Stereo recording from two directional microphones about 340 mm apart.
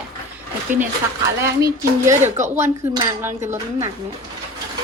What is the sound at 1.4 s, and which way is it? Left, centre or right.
Dishes, centre.